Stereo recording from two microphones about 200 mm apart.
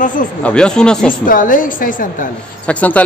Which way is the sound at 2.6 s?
5° left (ahead or behind).